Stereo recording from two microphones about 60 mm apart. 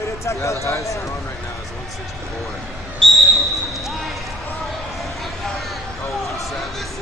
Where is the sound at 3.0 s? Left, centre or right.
Centre.